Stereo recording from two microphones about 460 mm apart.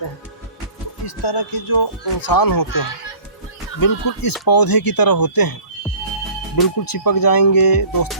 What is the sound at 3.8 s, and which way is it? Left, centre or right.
Speech, left.